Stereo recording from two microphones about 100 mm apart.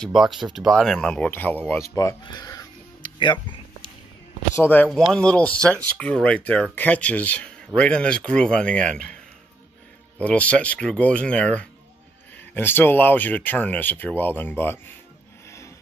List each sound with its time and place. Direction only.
0.0 s speech: 5° right (ahead or behind); by 1.8 s 20° left (ahead or behind)
2.2 s speech: 40° left (ahead or behind)
3.0 s music: 55° left (ahead or behind)
4.6 s speech: 20° left (ahead or behind)
10.2 s speech: 10° left (ahead or behind)